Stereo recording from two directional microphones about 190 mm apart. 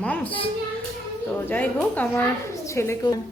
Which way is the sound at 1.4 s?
10° left (ahead or behind).